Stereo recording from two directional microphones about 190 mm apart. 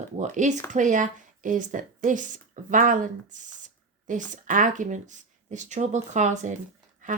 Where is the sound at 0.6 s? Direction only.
40° right (ahead or behind).